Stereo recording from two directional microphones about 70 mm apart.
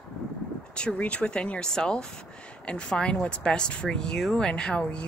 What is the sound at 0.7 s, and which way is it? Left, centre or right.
Speech, centre.